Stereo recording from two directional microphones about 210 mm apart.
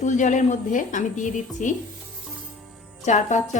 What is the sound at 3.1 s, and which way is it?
Speech, 35° left (ahead or behind).